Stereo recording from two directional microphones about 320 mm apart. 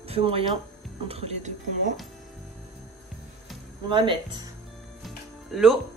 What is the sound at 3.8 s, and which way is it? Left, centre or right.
Speech, centre.